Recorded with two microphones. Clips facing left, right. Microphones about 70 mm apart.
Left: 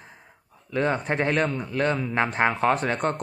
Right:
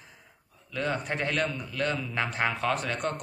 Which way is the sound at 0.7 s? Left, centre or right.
Left.